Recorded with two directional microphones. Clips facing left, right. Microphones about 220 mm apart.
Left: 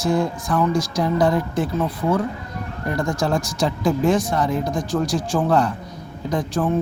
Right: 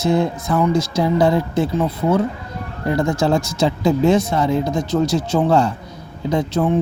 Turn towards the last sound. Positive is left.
turn(degrees=-25)  # may be behind; listen again after turning